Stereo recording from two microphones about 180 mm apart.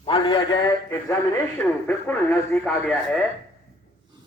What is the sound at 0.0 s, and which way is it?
Speech, 30° left (ahead or behind).